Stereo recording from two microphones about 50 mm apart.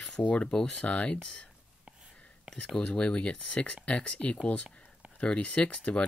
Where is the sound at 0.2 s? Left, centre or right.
Left.